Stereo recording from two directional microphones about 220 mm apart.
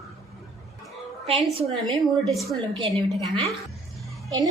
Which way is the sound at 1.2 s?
25° right (ahead or behind).